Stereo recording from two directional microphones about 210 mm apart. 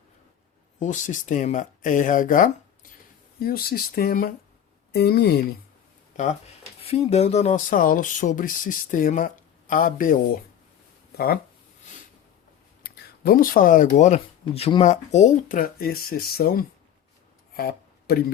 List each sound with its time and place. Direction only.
0.8 s speech: 35° left (ahead or behind)
6.8 s speech: 30° left (ahead or behind)
12.8 s speech: 45° left (ahead or behind)
17.6 s a sound: 50° left (ahead or behind)